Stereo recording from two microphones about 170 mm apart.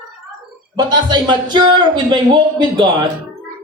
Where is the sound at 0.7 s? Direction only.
25° right (ahead or behind).